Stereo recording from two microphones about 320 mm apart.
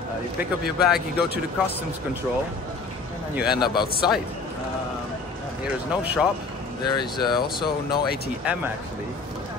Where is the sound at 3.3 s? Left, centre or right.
Centre.